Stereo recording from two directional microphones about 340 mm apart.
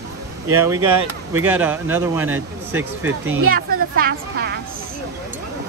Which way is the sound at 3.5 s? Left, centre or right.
Right.